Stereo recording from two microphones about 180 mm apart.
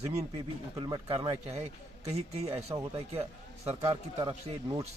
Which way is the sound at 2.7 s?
25° right (ahead or behind).